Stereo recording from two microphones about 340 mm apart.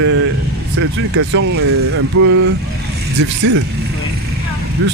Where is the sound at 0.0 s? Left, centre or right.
Right.